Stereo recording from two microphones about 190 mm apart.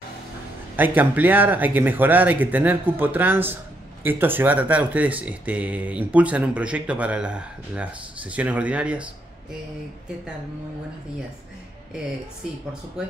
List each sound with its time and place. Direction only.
0.7 s speech: 10° right (ahead or behind)